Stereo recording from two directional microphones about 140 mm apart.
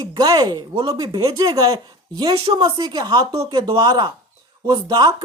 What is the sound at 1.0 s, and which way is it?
A man's voice, 25° right (ahead or behind).